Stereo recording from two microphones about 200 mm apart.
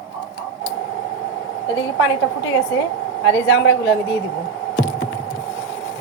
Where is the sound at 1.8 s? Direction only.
70° left (ahead or behind).